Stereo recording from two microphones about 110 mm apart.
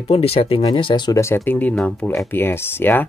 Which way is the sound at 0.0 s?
65° left (ahead or behind).